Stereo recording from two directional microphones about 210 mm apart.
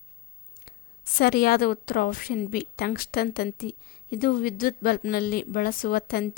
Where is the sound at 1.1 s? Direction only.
45° left (ahead or behind).